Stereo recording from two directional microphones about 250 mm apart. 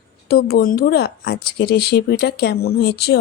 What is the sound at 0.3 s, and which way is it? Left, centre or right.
Speech, left.